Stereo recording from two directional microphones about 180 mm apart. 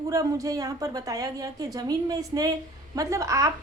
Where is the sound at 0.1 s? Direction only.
20° right (ahead or behind).